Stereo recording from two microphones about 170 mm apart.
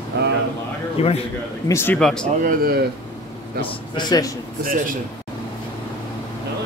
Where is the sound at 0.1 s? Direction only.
90° right.